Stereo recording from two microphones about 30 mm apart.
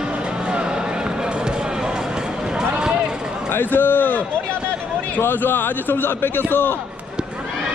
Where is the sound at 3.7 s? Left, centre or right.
Left.